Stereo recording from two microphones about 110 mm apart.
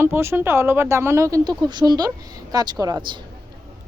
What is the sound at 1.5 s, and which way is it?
Speech, 40° right (ahead or behind).